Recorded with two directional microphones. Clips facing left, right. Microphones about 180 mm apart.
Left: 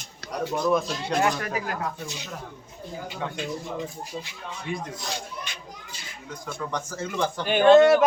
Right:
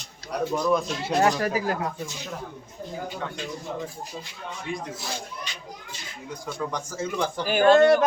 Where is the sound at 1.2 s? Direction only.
35° right (ahead or behind).